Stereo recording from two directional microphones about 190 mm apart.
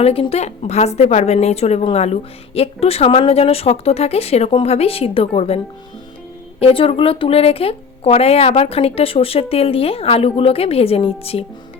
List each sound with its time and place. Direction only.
0.0 s speech: 30° left (ahead or behind)
6.6 s speech: 30° left (ahead or behind)